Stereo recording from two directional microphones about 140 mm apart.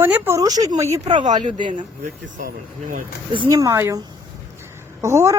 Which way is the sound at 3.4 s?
25° right (ahead or behind).